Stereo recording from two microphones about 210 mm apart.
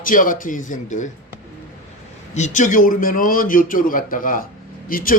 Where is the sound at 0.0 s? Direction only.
40° left (ahead or behind).